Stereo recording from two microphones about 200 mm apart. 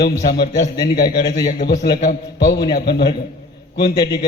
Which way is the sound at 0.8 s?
25° left (ahead or behind).